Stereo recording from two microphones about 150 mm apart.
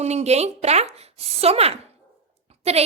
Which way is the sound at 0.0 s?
45° right (ahead or behind).